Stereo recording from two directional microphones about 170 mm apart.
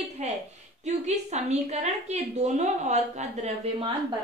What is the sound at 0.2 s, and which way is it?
A woman's voice, 45° right (ahead or behind).